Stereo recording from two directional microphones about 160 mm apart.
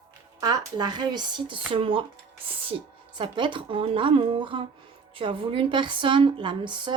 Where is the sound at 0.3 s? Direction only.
25° right (ahead or behind).